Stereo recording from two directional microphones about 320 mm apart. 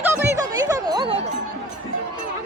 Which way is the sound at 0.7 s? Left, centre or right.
Centre.